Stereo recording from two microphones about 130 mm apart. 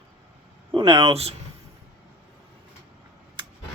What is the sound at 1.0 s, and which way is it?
Speech, 50° right (ahead or behind).